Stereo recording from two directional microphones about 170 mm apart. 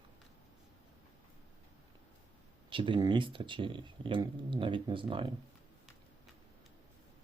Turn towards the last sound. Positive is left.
turn(degrees=-30)  # may be behind; listen again after turning